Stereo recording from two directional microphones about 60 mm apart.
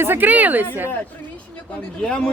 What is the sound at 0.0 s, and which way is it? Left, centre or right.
Speech, right.